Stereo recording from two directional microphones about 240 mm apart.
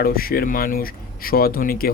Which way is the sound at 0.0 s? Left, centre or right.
Left.